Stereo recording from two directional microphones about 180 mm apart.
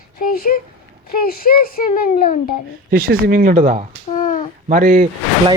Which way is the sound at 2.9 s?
55° right (ahead or behind).